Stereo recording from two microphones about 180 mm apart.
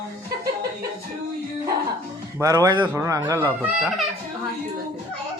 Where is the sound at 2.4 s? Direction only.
20° right (ahead or behind).